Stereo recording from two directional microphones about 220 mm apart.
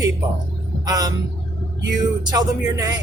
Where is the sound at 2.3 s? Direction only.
15° right (ahead or behind).